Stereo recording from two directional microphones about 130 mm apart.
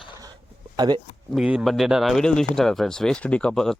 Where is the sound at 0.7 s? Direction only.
35° right (ahead or behind).